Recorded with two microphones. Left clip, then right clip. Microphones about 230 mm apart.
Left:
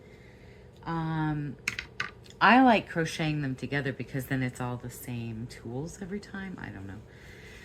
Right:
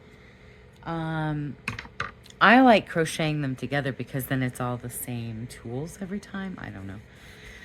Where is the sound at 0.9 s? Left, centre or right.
Right.